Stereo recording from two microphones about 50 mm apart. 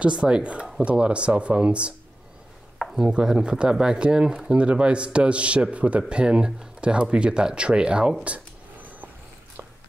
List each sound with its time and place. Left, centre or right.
0.0 s a man's voice: right
2.8 s chopping: centre
3.1 s a man's voice: centre
8.2 s a sound: right